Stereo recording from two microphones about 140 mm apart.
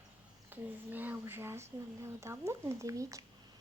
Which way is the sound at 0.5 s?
15° right (ahead or behind).